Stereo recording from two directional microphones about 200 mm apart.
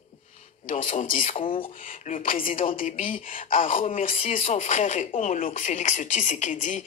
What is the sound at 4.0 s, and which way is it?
Speech, 40° left (ahead or behind).